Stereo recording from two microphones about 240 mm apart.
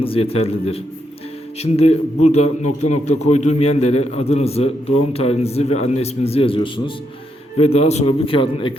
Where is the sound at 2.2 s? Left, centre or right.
Left.